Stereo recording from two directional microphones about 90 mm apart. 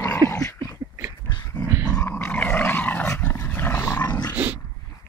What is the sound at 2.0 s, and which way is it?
Dog, 25° left (ahead or behind).